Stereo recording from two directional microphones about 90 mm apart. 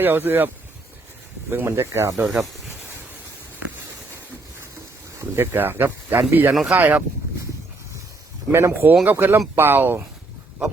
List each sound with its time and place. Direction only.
0.0 s speech: 20° right (ahead or behind)
2.2 s speech: 5° right (ahead or behind)
5.2 s speech: 25° right (ahead or behind)
8.5 s speech: 25° right (ahead or behind)